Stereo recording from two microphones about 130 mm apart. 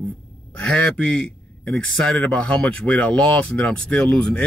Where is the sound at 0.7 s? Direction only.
10° left (ahead or behind).